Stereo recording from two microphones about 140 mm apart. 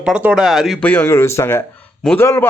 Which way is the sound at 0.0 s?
5° right (ahead or behind).